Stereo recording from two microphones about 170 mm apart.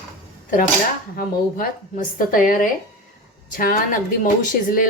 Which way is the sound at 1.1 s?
60° left (ahead or behind).